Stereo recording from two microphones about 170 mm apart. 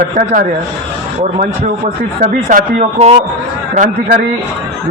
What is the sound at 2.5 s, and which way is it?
Speech, 45° right (ahead or behind).